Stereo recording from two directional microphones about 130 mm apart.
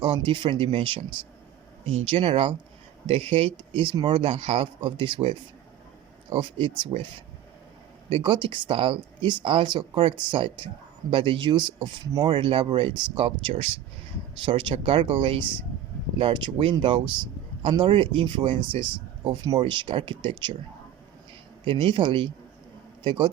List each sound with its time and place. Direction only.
0.0 s speech: 40° right (ahead or behind)
8.1 s speech: 35° right (ahead or behind)
21.6 s speech: 40° right (ahead or behind)